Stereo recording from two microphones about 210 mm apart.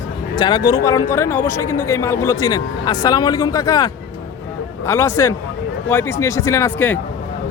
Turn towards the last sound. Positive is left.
turn(degrees=10)  # may be behind; listen again after turning